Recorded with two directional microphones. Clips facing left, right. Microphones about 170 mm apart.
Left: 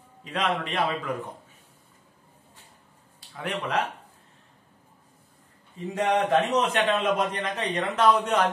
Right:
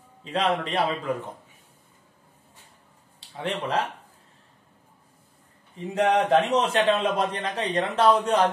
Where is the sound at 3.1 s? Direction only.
25° right (ahead or behind).